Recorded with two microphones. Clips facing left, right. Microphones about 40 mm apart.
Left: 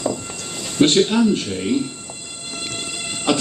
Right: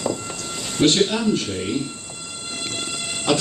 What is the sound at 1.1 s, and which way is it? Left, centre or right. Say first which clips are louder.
Speech: left 7 dB; left.